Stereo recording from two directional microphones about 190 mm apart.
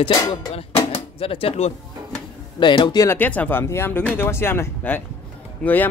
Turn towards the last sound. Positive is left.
turn(degrees=5)  # may be behind; listen again after turning